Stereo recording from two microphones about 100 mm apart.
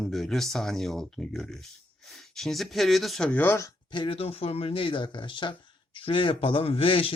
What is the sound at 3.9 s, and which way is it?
Speech, 55° left (ahead or behind).